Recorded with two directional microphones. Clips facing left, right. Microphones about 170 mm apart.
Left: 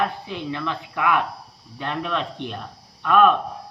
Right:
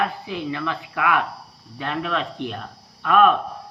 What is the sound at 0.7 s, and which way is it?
Speech, 25° left (ahead or behind).